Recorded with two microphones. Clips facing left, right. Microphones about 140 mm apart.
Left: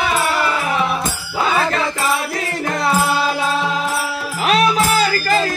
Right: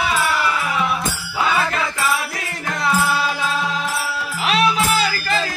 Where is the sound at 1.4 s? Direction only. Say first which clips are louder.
Left 3 dB; 30° left (ahead or behind).